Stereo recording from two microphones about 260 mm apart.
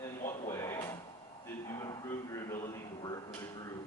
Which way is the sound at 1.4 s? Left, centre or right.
Centre.